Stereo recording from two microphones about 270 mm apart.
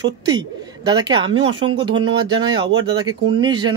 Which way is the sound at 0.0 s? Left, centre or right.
Centre.